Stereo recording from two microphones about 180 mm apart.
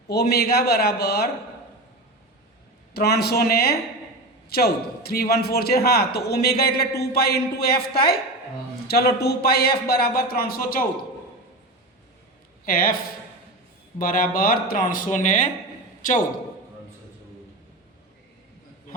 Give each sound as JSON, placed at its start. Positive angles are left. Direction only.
{"t": 0.1, "sound": "speech", "side_deg": 65}
{"t": 2.9, "sound": "speech", "side_deg": 65}
{"t": 12.6, "sound": "speech", "side_deg": 50}
{"t": 14.0, "sound": "speech", "side_deg": 50}
{"t": 16.0, "sound": "a sound", "side_deg": 45}